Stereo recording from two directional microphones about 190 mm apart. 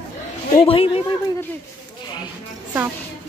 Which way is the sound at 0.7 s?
30° left (ahead or behind).